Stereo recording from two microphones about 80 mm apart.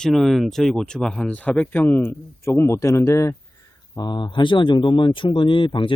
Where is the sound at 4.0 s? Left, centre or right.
Left.